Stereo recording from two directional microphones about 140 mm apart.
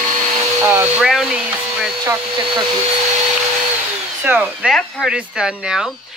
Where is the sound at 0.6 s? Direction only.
15° right (ahead or behind).